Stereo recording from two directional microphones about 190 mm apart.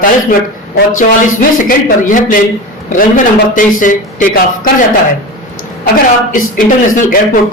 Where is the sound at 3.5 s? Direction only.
45° left (ahead or behind).